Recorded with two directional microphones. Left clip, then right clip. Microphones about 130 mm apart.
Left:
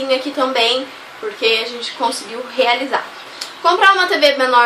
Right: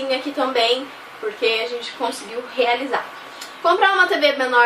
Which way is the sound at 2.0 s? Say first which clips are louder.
Left 6 dB; 20° left (ahead or behind).